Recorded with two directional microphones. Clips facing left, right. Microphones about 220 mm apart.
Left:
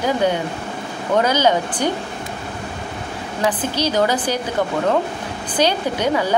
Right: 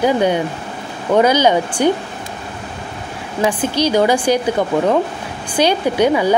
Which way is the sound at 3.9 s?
10° right (ahead or behind).